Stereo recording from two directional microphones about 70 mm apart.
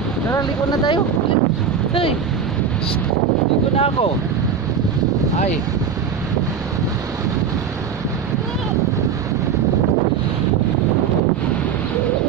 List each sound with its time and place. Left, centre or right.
0.4 s speech: left